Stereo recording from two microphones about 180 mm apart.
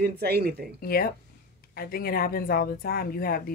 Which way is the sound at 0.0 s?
60° right (ahead or behind).